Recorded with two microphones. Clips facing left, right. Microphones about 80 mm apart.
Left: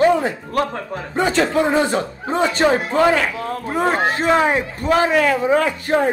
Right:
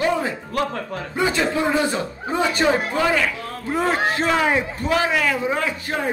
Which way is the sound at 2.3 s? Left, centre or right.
Left.